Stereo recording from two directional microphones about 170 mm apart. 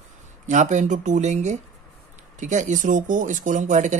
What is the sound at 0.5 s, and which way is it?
Speech, 45° right (ahead or behind).